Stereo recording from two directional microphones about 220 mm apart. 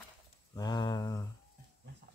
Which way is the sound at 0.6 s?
15° left (ahead or behind).